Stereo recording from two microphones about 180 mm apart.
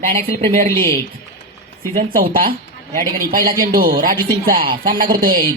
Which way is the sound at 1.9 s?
50° right (ahead or behind).